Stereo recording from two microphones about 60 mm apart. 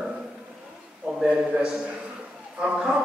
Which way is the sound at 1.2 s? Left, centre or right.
Centre.